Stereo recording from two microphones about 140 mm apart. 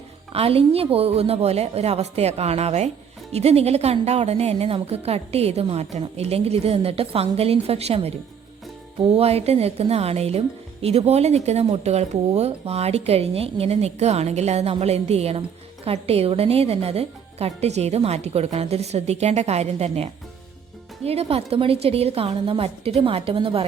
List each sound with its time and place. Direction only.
0.3 s speech: 45° right (ahead or behind)